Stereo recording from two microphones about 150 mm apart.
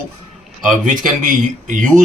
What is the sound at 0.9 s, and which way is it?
Speech, 60° right (ahead or behind).